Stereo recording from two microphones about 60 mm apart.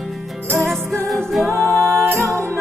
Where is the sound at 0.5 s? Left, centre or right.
Centre.